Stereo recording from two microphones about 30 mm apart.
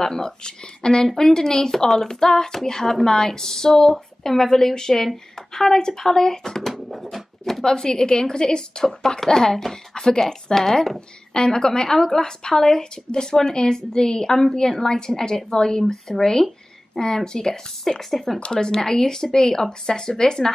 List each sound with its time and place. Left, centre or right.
0.0 s a woman's voice: centre
1.0 s a woman's voice: centre
6.9 s a sound: centre
7.6 s a woman's voice: left
9.2 s a woman's voice: centre
11.3 s a woman's voice: left
17.9 s a woman's voice: centre
18.5 s a woman's voice: left